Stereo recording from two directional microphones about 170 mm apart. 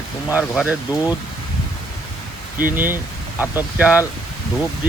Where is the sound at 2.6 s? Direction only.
10° right (ahead or behind).